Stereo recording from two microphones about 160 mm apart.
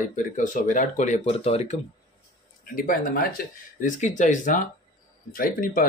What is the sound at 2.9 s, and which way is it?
Speech, 65° left (ahead or behind).